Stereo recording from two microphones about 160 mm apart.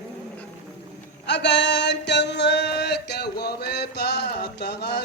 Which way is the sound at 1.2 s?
90° left.